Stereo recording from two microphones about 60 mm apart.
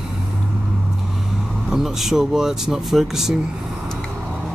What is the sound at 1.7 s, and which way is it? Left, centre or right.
Speech, centre.